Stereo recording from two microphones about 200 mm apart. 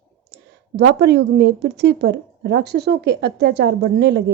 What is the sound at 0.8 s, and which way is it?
Speech, 55° right (ahead or behind).